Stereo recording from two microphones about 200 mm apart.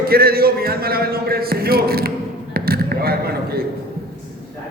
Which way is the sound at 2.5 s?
50° right (ahead or behind).